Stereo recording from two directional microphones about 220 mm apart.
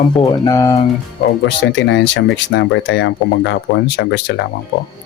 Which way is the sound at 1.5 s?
55° left (ahead or behind).